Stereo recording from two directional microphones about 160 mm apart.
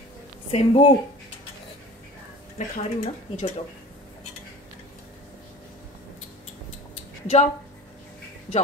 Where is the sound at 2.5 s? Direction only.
45° left (ahead or behind).